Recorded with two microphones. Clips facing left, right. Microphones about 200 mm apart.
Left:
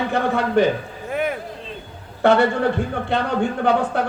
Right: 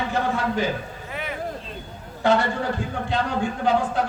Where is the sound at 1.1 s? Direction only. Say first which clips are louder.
Left 11 dB; 50° left (ahead or behind).